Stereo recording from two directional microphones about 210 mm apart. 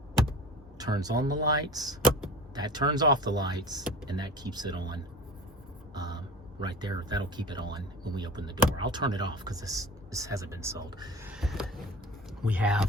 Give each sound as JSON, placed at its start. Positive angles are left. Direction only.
{"t": 0.8, "sound": "speech", "side_deg": -20}
{"t": 11.3, "sound": "a sound", "side_deg": 0}
{"t": 12.4, "sound": "speech", "side_deg": -5}